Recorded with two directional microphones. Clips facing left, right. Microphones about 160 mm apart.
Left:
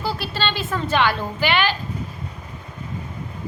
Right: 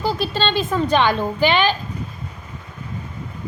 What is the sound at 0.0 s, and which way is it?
A woman's voice, 15° right (ahead or behind).